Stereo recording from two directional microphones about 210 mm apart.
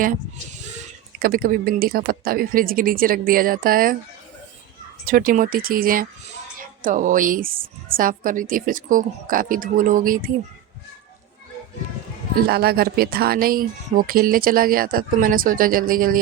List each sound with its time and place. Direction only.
0.8 s speech: 45° right (ahead or behind)
5.0 s a woman's voice: 45° right (ahead or behind)
12.4 s speech: 50° right (ahead or behind)